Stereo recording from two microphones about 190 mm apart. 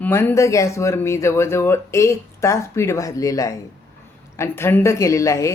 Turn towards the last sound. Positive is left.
turn(degrees=15)  # may be behind; listen again after turning